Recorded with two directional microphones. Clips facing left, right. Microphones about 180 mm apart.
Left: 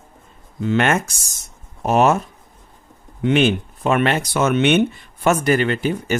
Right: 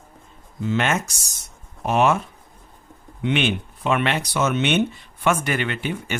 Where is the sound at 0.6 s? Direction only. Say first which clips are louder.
Left 4 dB; 60° left (ahead or behind).